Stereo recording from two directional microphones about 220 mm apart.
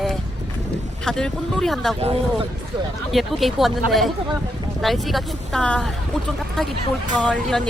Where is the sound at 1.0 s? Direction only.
5° left (ahead or behind).